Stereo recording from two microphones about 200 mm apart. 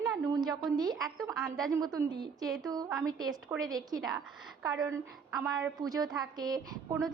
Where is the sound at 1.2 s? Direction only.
Centre (ahead or behind).